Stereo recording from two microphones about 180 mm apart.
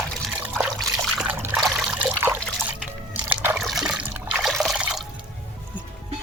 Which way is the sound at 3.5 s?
Centre (ahead or behind).